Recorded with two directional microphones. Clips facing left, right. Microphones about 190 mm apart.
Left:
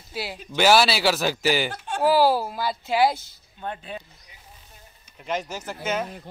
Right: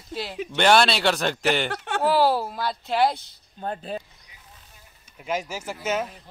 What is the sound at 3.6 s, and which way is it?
Speech, 40° right (ahead or behind).